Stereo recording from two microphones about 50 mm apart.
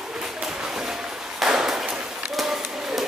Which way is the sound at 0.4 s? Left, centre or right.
Centre.